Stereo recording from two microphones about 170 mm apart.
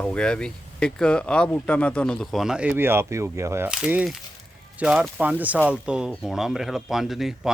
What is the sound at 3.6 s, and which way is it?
Speech, 5° right (ahead or behind).